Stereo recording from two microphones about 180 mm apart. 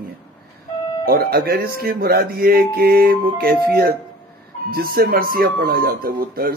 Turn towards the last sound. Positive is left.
turn(degrees=-55)  # may be behind; listen again after turning